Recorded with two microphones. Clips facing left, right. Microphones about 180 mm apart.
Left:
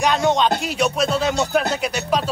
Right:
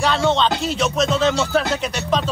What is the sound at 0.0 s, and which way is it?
Music, 15° left (ahead or behind).